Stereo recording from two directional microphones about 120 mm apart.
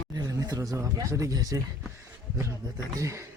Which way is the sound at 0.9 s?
30° right (ahead or behind).